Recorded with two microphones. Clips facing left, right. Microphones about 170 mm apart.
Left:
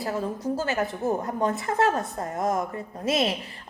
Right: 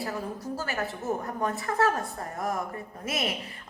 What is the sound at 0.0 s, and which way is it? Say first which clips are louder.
A woman's voice: left 5 dB; 20° left (ahead or behind).